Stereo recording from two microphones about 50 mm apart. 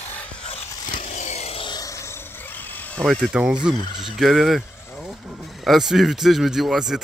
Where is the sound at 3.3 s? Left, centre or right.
Centre.